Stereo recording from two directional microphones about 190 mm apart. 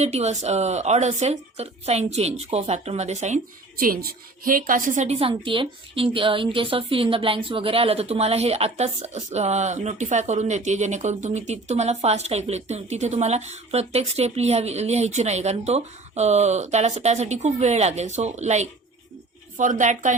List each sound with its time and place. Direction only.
0.0 s a woman's voice: 35° right (ahead or behind)